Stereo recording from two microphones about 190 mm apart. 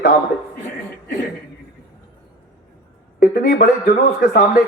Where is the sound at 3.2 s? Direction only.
50° left (ahead or behind).